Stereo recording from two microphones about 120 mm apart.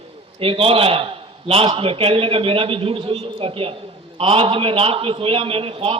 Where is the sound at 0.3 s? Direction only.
50° right (ahead or behind).